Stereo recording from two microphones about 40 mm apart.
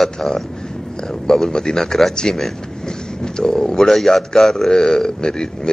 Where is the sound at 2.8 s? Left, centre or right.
Centre.